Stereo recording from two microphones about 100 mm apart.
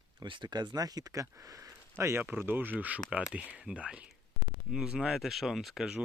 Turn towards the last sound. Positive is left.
turn(degrees=-5)  # may be behind; listen again after turning